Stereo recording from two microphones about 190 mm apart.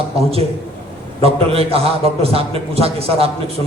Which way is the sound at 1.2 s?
30° right (ahead or behind).